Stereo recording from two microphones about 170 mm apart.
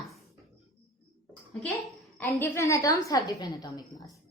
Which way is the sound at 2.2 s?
15° left (ahead or behind).